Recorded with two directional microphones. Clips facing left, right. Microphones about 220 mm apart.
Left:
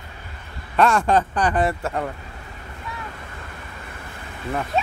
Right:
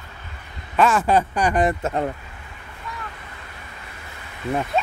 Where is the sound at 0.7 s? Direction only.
5° right (ahead or behind); by 2.1 s 20° right (ahead or behind).